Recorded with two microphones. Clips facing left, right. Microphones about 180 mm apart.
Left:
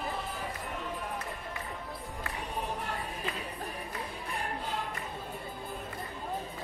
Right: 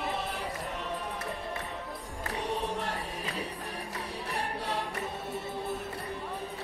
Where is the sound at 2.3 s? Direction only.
75° right (ahead or behind).